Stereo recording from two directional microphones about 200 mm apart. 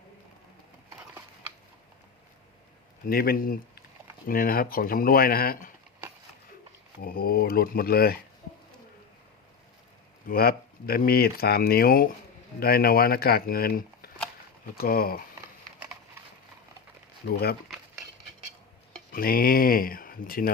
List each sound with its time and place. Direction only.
3.1 s speech: 50° left (ahead or behind)
7.0 s speech: 50° left (ahead or behind)
10.2 s speech: 50° left (ahead or behind)
17.2 s speech: 50° left (ahead or behind)
19.1 s speech: 45° left (ahead or behind)